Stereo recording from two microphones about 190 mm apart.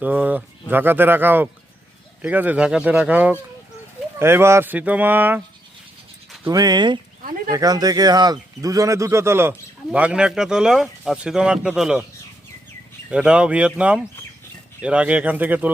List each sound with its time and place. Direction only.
0.0 s speech: 10° right (ahead or behind)
6.4 s speech: 20° right (ahead or behind)
7.2 s bird: 45° right (ahead or behind)
7.5 s speech: 20° right (ahead or behind); by 12.0 s 5° right (ahead or behind)
13.1 s speech: 5° right (ahead or behind)